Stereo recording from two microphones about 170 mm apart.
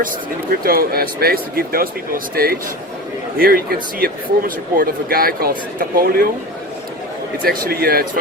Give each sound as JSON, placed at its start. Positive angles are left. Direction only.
{"t": 0.6, "sound": "speech", "side_deg": -60}
{"t": 7.4, "sound": "speech", "side_deg": -60}